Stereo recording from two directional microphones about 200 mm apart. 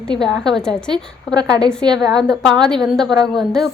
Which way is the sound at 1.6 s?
5° left (ahead or behind).